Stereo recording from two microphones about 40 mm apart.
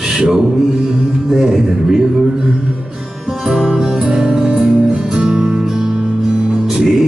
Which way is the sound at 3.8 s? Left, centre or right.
Centre.